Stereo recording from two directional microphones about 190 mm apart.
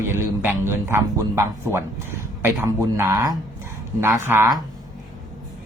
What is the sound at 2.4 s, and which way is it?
Speech, 15° right (ahead or behind).